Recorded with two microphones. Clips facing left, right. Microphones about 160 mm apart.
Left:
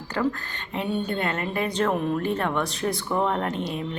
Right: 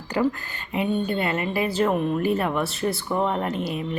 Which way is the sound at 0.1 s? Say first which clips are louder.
Right 3 dB; 15° right (ahead or behind).